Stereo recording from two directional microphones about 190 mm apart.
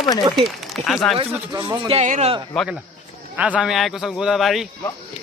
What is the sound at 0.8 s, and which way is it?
A man's voice, 35° right (ahead or behind).